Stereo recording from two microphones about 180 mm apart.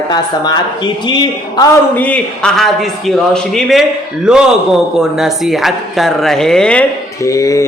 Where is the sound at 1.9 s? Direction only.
5° left (ahead or behind).